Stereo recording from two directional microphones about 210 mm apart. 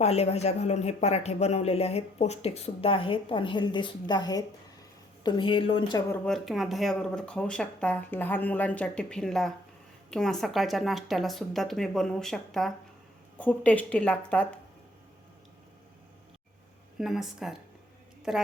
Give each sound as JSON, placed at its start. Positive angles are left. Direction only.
{"t": 0.0, "sound": "speech", "side_deg": 30}
{"t": 6.2, "sound": "speech", "side_deg": 0}
{"t": 17.0, "sound": "speech", "side_deg": 0}